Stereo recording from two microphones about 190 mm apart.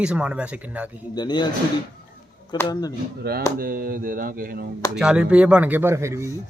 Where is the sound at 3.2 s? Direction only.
55° right (ahead or behind).